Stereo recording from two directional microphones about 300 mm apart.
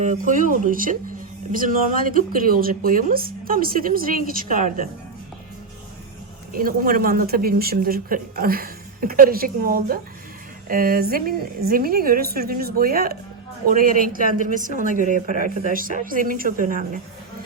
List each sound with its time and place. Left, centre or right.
0.0 s speech: right
6.5 s speech: right